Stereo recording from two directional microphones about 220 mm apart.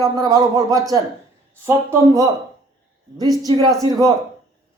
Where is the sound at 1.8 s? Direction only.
15° right (ahead or behind).